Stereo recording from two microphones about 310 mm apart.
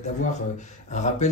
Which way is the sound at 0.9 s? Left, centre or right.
Left.